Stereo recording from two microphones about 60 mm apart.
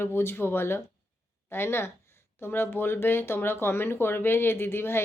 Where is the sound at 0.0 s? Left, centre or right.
Left.